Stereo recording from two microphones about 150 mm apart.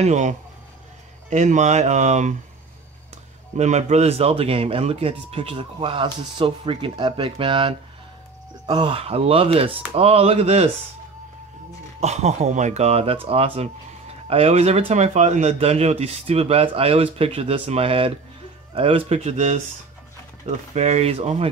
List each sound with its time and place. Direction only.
0.0 s speech: 55° right (ahead or behind)
3.5 s speech: 50° right (ahead or behind)
12.0 s speech: 45° right (ahead or behind)
20.7 s speech: 45° right (ahead or behind)